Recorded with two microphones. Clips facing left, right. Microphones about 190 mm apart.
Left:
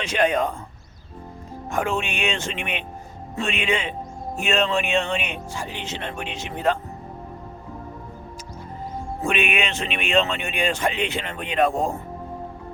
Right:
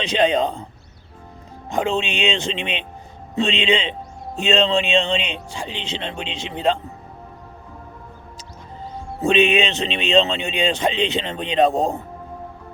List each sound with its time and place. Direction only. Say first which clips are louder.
1.7 s speech: right 3 dB; 20° right (ahead or behind)
9.2 s speech: right 7 dB; 25° right (ahead or behind)